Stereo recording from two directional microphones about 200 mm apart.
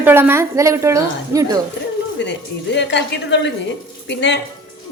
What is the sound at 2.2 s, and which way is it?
A woman's voice, 60° left (ahead or behind).